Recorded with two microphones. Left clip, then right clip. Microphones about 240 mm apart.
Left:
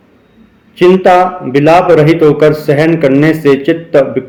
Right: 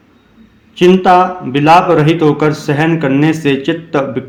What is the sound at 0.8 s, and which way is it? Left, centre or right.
A man's voice, right.